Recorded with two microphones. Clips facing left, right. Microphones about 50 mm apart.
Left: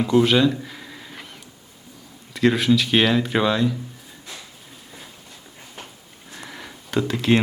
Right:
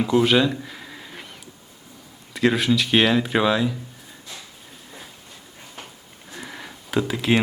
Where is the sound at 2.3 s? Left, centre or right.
Centre.